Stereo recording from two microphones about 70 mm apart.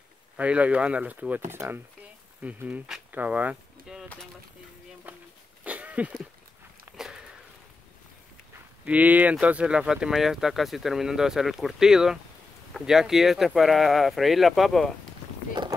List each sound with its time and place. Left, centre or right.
0.4 s speech: right
3.9 s bird: centre
5.1 s a sound: right
7.0 s sniff: centre
8.8 s speech: right; by 14.9 s centre